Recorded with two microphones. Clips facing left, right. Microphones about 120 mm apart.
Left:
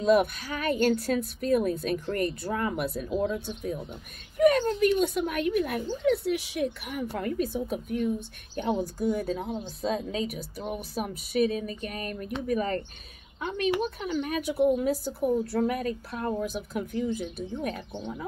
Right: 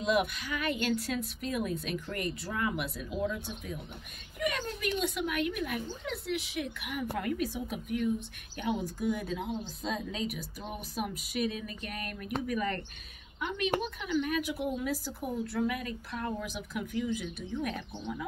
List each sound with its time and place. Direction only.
0.0 s a woman's voice: 45° left (ahead or behind)
13.9 s a woman's voice: 35° left (ahead or behind)